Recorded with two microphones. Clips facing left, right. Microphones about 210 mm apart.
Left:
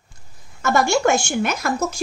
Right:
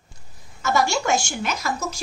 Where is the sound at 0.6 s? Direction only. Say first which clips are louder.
Left 4 dB; 55° left (ahead or behind).